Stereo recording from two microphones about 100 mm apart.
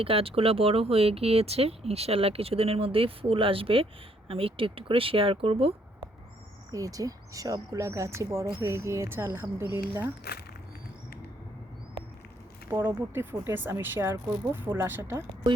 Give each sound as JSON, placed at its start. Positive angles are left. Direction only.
{"t": 0.0, "sound": "speech", "side_deg": -70}
{"t": 6.7, "sound": "speech", "side_deg": -35}
{"t": 12.7, "sound": "speech", "side_deg": -20}